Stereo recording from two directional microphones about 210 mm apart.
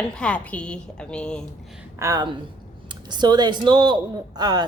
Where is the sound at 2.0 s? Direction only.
20° right (ahead or behind).